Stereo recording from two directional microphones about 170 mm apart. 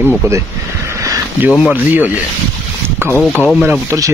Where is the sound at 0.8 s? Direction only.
15° right (ahead or behind).